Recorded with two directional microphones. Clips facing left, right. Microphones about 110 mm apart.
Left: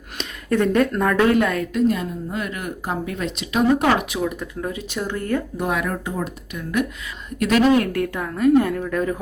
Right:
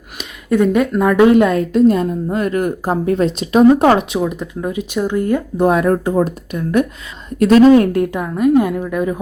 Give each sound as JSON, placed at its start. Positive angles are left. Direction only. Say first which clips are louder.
{"t": 0.2, "sound": "speech", "louder": "right 5 dB", "side_deg": -10}
{"t": 1.9, "sound": "a woman's voice", "louder": "right 8 dB", "side_deg": -40}
{"t": 5.5, "sound": "a woman's voice", "louder": "right 10 dB", "side_deg": -35}